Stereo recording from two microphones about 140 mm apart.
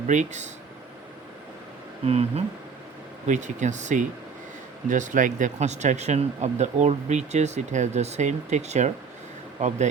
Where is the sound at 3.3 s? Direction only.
60° right (ahead or behind).